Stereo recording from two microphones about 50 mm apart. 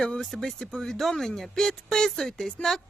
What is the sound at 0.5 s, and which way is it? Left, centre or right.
Speech, centre.